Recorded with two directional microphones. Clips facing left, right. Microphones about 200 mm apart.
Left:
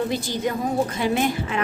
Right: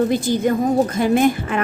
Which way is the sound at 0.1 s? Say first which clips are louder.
Right 7 dB; 50° right (ahead or behind).